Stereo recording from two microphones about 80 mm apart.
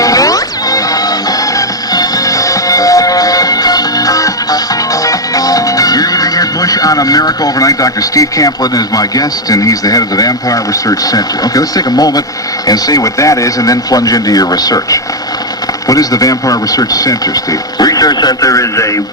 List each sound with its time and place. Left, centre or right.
0.0 s music: left
5.0 s speech: left